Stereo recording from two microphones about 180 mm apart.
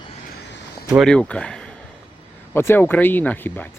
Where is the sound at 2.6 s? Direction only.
15° left (ahead or behind).